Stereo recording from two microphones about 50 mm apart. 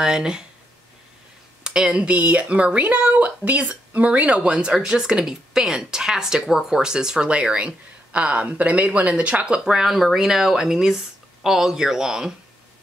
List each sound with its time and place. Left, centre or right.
0.0 s speech: centre
1.6 s speech: centre